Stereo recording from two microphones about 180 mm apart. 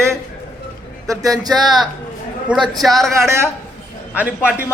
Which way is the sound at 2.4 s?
Centre (ahead or behind).